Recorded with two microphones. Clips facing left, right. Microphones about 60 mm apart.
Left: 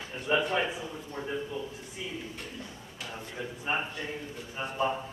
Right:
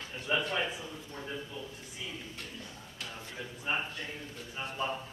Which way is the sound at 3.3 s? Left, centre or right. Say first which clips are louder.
Left 3 dB; centre.